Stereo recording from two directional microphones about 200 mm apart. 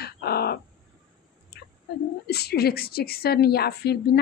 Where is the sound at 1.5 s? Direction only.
50° left (ahead or behind).